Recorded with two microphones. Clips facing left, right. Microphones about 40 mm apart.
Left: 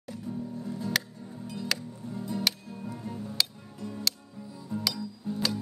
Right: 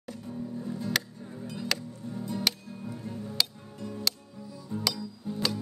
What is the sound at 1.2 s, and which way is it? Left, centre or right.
Music, right.